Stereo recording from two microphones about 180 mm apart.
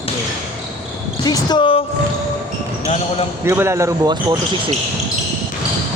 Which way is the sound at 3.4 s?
15° right (ahead or behind).